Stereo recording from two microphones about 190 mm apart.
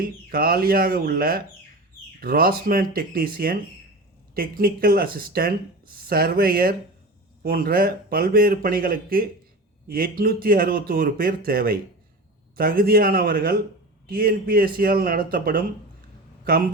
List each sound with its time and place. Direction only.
0.0 s speech: 50° right (ahead or behind)